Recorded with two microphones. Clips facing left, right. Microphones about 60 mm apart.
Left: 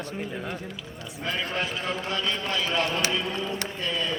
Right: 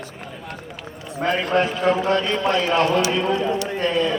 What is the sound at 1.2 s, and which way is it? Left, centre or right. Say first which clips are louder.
A man's voice: right 10 dB; right.